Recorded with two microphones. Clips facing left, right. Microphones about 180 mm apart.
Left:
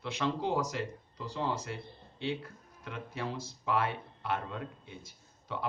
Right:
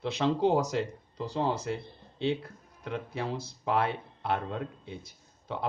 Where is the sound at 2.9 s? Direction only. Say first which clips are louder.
Right 5 dB; 60° right (ahead or behind).